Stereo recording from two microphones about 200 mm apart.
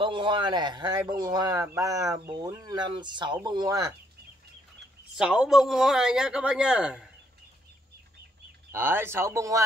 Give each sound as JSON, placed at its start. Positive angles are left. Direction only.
{"t": 0.0, "sound": "speech", "side_deg": -25}
{"t": 5.1, "sound": "a man's voice", "side_deg": -5}
{"t": 8.7, "sound": "speech", "side_deg": -10}